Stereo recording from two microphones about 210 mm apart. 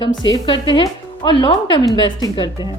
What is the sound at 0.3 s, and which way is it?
Speech, 25° left (ahead or behind).